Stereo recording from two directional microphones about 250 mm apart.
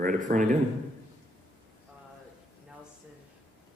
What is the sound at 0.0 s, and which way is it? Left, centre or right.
Speech, right.